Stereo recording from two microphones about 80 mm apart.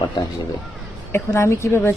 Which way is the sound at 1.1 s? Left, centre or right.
Left.